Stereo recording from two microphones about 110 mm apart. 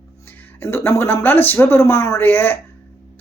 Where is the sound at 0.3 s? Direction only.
20° left (ahead or behind).